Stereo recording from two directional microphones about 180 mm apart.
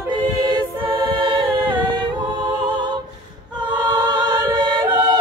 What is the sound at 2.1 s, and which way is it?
Music, 25° right (ahead or behind).